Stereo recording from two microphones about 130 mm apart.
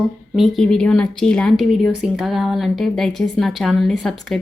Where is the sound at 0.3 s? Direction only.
Centre (ahead or behind).